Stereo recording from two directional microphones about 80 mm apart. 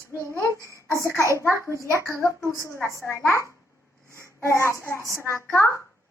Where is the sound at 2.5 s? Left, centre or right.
Left.